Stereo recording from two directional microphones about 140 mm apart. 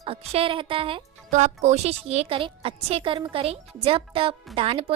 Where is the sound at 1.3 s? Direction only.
55° right (ahead or behind).